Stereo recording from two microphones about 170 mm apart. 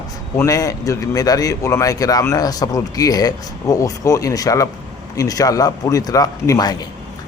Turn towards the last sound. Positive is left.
turn(degrees=25)  # may be behind; listen again after turning